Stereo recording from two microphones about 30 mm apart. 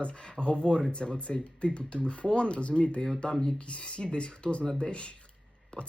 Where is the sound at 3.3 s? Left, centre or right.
Centre.